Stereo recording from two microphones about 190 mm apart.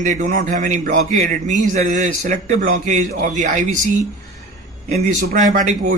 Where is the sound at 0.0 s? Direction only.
40° right (ahead or behind).